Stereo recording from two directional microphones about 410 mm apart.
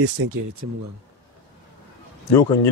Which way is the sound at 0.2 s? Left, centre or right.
Right.